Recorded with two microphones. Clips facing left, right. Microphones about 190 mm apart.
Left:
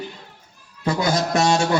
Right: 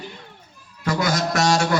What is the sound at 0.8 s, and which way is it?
Speech, 25° left (ahead or behind).